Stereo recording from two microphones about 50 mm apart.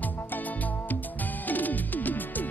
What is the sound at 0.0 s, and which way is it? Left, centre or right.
Music, left.